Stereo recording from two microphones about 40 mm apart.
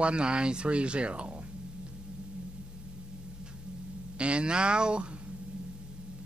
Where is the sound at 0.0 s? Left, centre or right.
Right.